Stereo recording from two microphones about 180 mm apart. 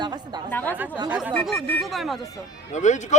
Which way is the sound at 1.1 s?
10° right (ahead or behind).